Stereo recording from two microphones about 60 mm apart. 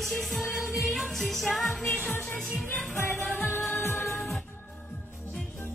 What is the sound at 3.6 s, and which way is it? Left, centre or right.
Music, left.